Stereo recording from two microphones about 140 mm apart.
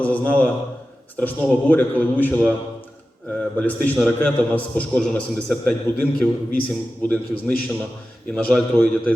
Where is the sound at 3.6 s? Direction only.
10° left (ahead or behind).